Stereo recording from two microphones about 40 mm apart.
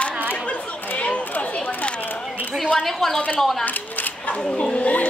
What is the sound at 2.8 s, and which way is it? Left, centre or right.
Speech, centre.